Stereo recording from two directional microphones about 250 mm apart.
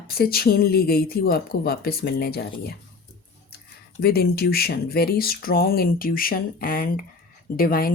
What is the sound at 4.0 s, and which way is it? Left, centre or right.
Speech, left.